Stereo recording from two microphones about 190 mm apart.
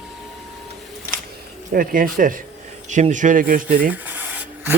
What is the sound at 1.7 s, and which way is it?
A man's voice, 50° right (ahead or behind).